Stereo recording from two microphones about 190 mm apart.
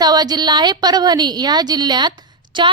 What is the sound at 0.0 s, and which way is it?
A woman's voice, 20° right (ahead or behind).